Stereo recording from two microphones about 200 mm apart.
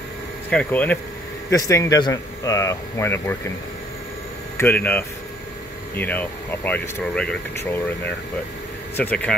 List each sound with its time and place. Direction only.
0.5 s speech: 5° left (ahead or behind)
4.6 s speech: 10° left (ahead or behind)